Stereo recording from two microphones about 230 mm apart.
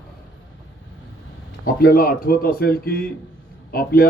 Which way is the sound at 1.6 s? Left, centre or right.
Left.